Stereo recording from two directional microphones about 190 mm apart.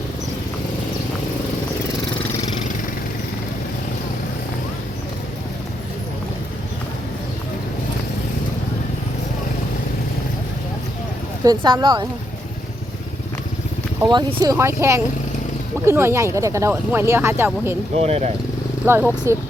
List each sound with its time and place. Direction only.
11.4 s speech: 25° right (ahead or behind)
14.0 s speech: 20° right (ahead or behind)
18.0 s speech: 35° right (ahead or behind)
18.9 s speech: 10° right (ahead or behind)